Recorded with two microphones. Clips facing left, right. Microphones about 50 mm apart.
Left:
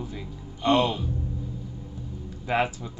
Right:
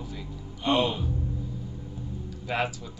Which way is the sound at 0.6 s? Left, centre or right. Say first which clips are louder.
Left 3 dB; centre.